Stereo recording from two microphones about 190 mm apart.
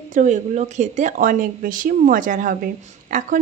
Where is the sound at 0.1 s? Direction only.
40° right (ahead or behind).